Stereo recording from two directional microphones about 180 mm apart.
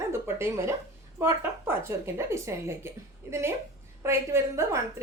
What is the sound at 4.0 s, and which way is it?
Speech, 15° right (ahead or behind).